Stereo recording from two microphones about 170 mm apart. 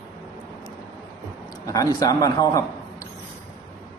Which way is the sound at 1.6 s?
20° left (ahead or behind).